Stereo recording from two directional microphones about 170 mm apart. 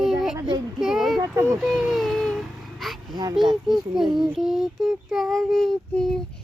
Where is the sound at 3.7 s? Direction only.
5° right (ahead or behind).